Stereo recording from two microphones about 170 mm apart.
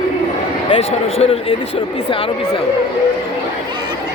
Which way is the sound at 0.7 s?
35° left (ahead or behind).